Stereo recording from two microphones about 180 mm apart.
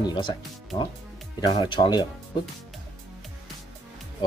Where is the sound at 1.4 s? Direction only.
25° left (ahead or behind).